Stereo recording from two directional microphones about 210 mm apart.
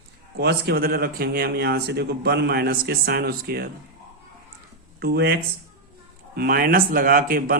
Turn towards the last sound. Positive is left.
turn(degrees=-40)  # may be behind; listen again after turning